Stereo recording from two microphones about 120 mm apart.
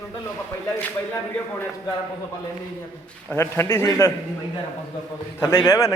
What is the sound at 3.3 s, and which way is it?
Speech, 20° left (ahead or behind).